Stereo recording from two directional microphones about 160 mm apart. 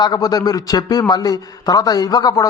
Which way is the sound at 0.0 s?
25° left (ahead or behind).